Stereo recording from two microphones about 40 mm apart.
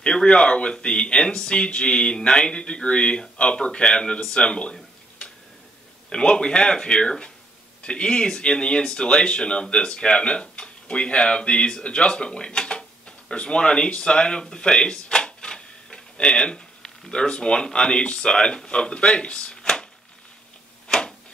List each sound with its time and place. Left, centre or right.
0.0 s speech: centre
6.0 s speech: left